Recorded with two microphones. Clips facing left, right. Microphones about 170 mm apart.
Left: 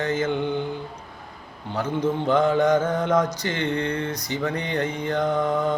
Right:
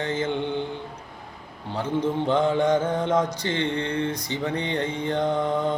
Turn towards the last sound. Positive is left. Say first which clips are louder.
# left 1 dB
turn(degrees=-25)  # may be behind; listen again after turning